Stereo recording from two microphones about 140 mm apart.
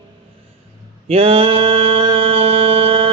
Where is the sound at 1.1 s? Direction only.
45° right (ahead or behind).